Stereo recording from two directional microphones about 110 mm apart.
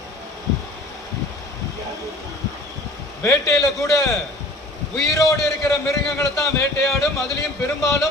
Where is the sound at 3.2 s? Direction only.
25° left (ahead or behind).